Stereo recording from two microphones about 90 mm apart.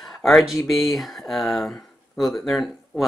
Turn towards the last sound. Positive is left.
turn(degrees=0)  # may be behind; listen again after turning